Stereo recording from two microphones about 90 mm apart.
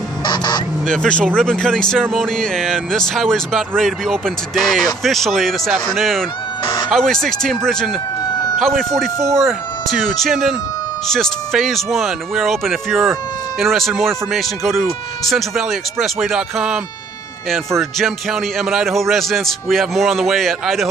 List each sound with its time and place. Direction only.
0.2 s a sound: 55° left (ahead or behind)
0.8 s speech: 10° left (ahead or behind)
6.6 s cat: 55° left (ahead or behind)
6.9 s speech: 5° left (ahead or behind)